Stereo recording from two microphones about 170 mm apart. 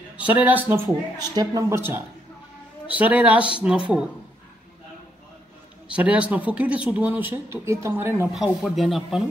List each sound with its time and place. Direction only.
0.2 s speech: 10° right (ahead or behind)
1.1 s a woman's voice: 20° right (ahead or behind); by 4.1 s 5° right (ahead or behind)
5.9 s speech: 10° right (ahead or behind)
8.3 s speech: centre (ahead or behind)